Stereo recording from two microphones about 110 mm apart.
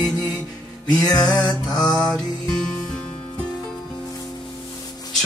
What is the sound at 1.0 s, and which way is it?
Music, 35° left (ahead or behind).